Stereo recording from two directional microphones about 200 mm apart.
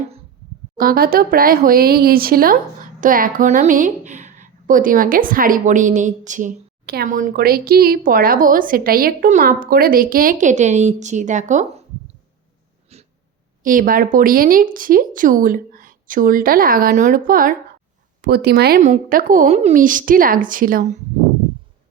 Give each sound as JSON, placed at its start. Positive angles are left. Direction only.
{"t": 0.8, "sound": "a woman's voice", "side_deg": -45}
{"t": 12.9, "sound": "a sound", "side_deg": -30}
{"t": 13.6, "sound": "a woman's voice", "side_deg": -45}